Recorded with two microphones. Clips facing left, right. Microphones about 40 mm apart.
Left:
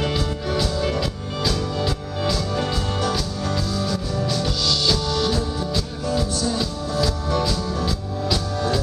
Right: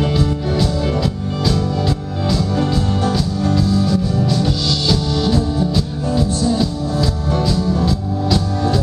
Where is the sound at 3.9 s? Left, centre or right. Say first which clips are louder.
Right 7 dB; centre.